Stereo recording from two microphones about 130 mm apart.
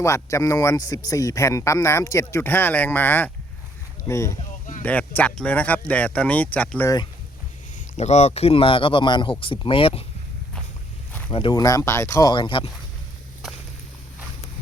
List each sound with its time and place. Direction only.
0.0 s speech: 25° left (ahead or behind)
6.8 s speech: 30° left (ahead or behind)
7.9 s speech: 60° left (ahead or behind); by 10.0 s 45° left (ahead or behind)
11.3 s speech: 40° left (ahead or behind)
11.5 s speech: 25° left (ahead or behind)
12.3 s speech: 40° left (ahead or behind)